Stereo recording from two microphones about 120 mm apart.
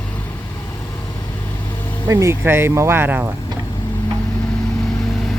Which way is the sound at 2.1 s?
25° right (ahead or behind).